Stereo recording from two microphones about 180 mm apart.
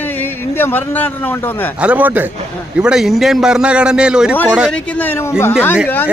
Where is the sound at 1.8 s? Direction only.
10° right (ahead or behind).